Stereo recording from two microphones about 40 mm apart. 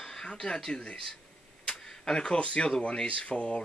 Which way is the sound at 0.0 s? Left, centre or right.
Centre.